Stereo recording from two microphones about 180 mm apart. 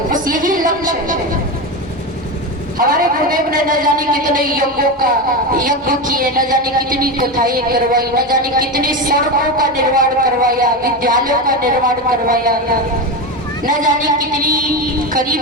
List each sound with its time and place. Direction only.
0.1 s a sound: 50° right (ahead or behind)
2.7 s a woman's voice: 50° right (ahead or behind)
13.7 s a woman's voice: 50° right (ahead or behind)